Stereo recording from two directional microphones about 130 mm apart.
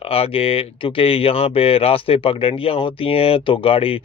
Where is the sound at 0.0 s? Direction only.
45° left (ahead or behind).